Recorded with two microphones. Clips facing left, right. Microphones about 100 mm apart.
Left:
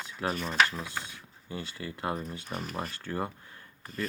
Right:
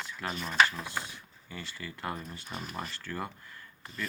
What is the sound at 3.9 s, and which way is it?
Speech, 45° left (ahead or behind).